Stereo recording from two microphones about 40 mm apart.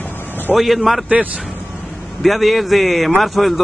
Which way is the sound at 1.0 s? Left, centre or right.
Right.